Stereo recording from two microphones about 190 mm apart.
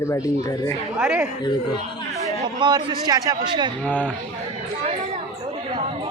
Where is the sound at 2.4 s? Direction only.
25° right (ahead or behind).